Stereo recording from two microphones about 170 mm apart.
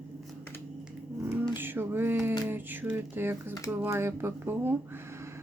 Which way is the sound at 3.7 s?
10° right (ahead or behind).